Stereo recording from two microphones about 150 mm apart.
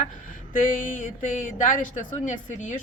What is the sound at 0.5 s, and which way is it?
A woman's voice, 65° left (ahead or behind).